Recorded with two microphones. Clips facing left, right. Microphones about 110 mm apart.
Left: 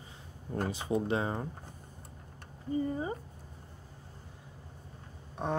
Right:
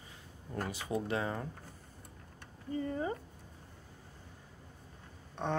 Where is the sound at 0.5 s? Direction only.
25° left (ahead or behind).